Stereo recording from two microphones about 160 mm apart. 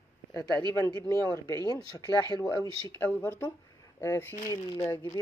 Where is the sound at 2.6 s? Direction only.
10° left (ahead or behind).